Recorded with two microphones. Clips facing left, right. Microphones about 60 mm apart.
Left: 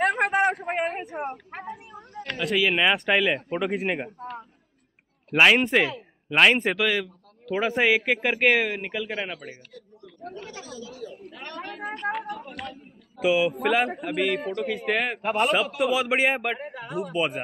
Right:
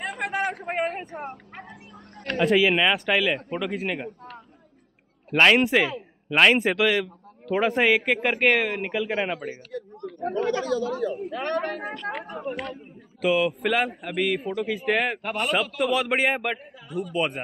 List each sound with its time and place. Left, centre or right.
0.0 s a sound: left
0.3 s a man's voice: left
2.3 s speech: centre
2.7 s speech: centre
3.8 s speech: left
5.3 s speech: centre
8.8 s a man's voice: centre; by 9.8 s right
10.2 s speech: right
12.1 s a man's voice: right
13.2 s speech: centre
16.5 s speech: left
17.1 s speech: centre